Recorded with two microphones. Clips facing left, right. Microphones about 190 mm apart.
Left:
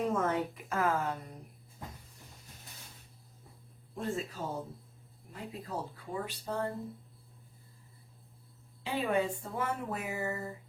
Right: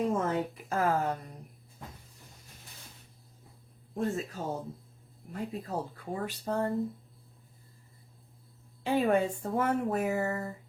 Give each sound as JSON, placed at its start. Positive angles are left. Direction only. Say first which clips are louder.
{"t": 0.1, "sound": "a woman's voice", "louder": "right 1 dB", "side_deg": -30}
{"t": 3.9, "sound": "speech", "louder": "right 4 dB", "side_deg": -45}
{"t": 8.8, "sound": "speech", "louder": "right 5 dB", "side_deg": -45}